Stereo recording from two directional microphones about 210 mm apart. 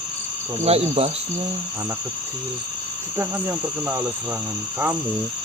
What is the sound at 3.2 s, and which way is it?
Speech, 10° right (ahead or behind).